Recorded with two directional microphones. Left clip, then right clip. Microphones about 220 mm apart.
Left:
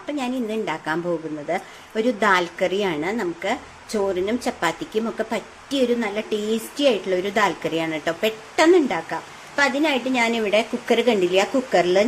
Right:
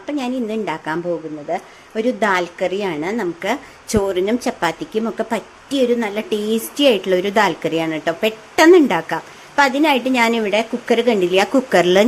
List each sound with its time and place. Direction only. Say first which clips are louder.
0.2 s a woman's voice: right 2 dB; 15° right (ahead or behind)
1.5 s a woman's voice: right 3 dB; 5° right (ahead or behind)
3.4 s a woman's voice: right 4 dB; 25° right (ahead or behind)